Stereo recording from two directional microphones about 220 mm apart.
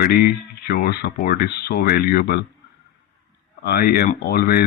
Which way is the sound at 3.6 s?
45° left (ahead or behind).